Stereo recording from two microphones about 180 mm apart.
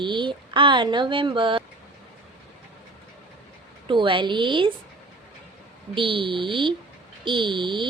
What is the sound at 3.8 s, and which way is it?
Speech, 25° right (ahead or behind).